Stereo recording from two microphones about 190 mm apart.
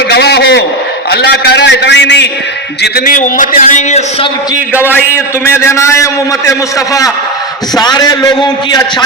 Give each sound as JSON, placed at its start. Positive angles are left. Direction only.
{"t": 0.1, "sound": "a sound", "side_deg": 60}
{"t": 1.1, "sound": "a man's voice", "side_deg": 60}
{"t": 3.2, "sound": "a man's voice", "side_deg": 45}
{"t": 5.5, "sound": "a man's voice", "side_deg": 15}
{"t": 7.8, "sound": "a man's voice", "side_deg": 20}